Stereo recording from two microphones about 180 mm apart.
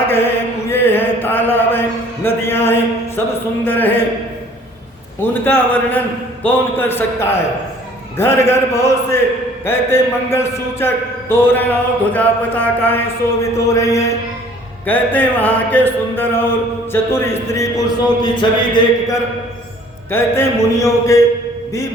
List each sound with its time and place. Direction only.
0.7 s mantra: 10° left (ahead or behind)
3.6 s a man's voice: 10° left (ahead or behind)
5.2 s a man's voice: 10° left (ahead or behind)